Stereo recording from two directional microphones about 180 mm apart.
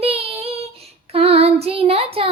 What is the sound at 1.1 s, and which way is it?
Female singing, 30° right (ahead or behind).